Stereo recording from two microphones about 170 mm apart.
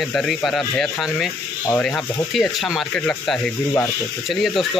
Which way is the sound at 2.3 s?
Centre (ahead or behind).